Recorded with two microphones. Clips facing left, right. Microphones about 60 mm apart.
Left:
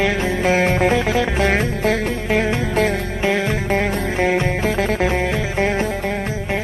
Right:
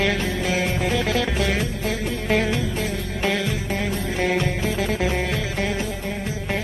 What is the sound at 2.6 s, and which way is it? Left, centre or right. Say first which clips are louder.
Music: left 8 dB; left.